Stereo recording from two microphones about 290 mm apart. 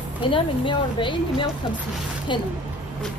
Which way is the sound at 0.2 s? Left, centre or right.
Centre.